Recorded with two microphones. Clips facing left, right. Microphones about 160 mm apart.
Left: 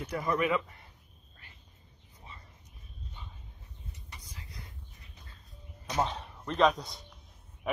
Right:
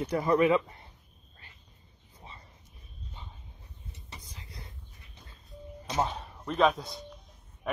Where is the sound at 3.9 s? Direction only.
25° right (ahead or behind).